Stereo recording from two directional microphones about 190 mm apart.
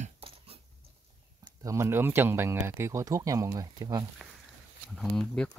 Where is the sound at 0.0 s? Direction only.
30° right (ahead or behind).